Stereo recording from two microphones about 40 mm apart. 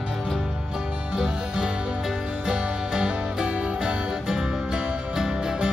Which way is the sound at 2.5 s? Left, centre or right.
Right.